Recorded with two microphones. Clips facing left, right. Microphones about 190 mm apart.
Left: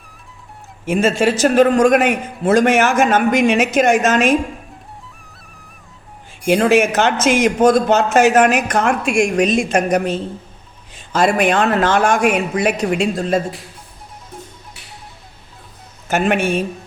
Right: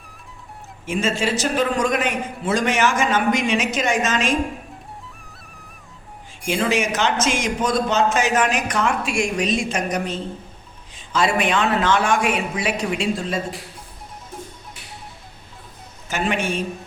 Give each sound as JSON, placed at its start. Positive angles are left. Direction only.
{"t": 0.9, "sound": "a man's voice", "side_deg": 55}
{"t": 6.5, "sound": "a man's voice", "side_deg": 55}
{"t": 16.0, "sound": "speech", "side_deg": 55}